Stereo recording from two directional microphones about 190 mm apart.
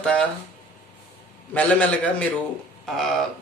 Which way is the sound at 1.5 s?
5° left (ahead or behind).